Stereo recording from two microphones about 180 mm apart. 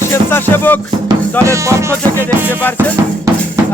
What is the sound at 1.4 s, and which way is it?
Music, 15° right (ahead or behind).